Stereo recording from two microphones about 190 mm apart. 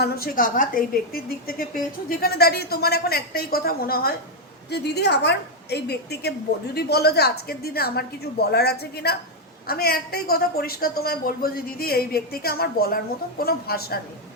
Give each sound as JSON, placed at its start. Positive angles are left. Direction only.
{"t": 0.0, "sound": "a woman's voice", "side_deg": 50}